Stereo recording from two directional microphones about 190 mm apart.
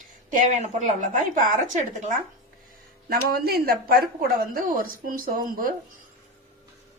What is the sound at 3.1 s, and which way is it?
Speech, 55° right (ahead or behind).